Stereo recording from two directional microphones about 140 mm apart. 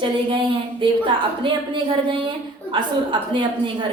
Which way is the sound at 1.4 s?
35° right (ahead or behind).